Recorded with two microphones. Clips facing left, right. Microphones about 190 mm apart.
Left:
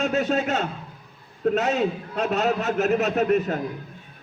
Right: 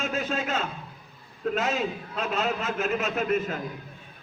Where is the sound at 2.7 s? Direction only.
40° left (ahead or behind).